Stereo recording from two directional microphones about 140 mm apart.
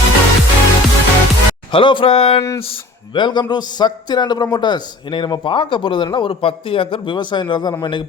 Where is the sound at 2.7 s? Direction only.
35° left (ahead or behind).